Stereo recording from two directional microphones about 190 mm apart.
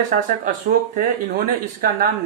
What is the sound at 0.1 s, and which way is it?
Speech, 45° right (ahead or behind).